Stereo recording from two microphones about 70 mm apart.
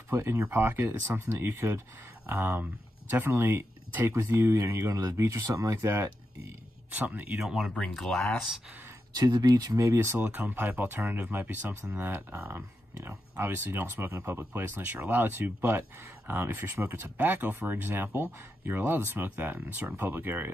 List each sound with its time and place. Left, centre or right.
0.1 s speech: right
7.0 s speech: right
7.4 s speech: centre
7.7 s speech: centre
9.1 s speech: right